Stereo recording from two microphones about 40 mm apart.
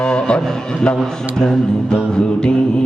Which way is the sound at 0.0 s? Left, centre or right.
Left.